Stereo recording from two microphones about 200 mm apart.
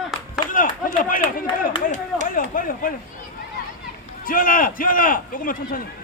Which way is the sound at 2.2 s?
45° left (ahead or behind).